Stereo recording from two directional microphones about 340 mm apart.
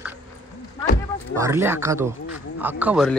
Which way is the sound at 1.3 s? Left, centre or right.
Centre.